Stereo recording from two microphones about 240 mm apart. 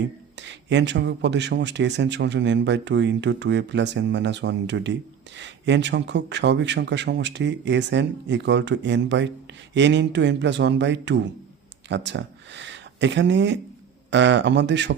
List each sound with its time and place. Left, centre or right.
0.0 s speech: right